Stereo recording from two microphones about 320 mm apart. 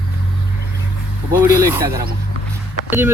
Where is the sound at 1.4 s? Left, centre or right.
Centre.